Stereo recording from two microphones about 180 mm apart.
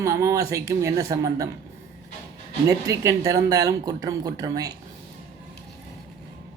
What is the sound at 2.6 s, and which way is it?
Speech, 15° right (ahead or behind).